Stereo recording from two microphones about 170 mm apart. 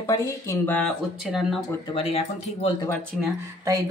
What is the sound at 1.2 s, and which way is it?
Speech, centre (ahead or behind).